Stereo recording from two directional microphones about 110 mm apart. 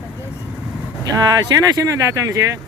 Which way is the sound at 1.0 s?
35° right (ahead or behind).